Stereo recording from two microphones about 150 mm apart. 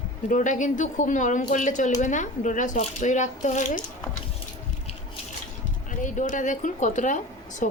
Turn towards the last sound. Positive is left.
turn(degrees=55)  # may be behind; listen again after turning